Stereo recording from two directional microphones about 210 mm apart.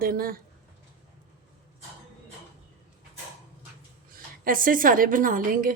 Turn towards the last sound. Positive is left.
turn(degrees=-40)  # may be behind; listen again after turning